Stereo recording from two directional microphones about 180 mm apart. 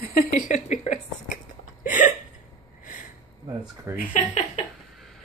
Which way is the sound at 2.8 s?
50° left (ahead or behind).